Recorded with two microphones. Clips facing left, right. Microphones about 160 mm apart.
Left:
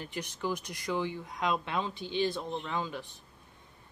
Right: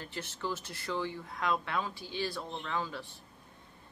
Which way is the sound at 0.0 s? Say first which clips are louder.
Left 3 dB; 15° left (ahead or behind).